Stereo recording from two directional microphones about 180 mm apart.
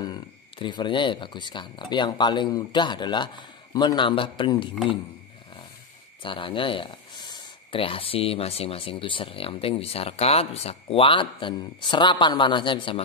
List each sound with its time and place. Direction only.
0.0 s speech: 25° left (ahead or behind)
6.2 s speech: 30° left (ahead or behind)